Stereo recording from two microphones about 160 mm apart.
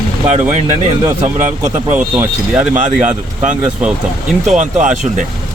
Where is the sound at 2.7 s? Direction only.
50° right (ahead or behind).